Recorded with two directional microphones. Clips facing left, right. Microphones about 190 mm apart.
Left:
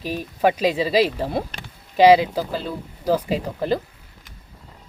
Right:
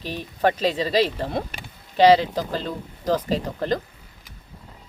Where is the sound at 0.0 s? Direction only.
10° left (ahead or behind).